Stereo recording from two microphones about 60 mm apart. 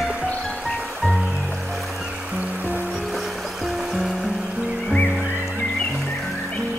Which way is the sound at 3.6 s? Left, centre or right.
Centre.